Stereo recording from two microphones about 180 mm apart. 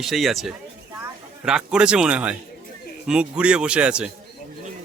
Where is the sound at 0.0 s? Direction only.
Centre (ahead or behind).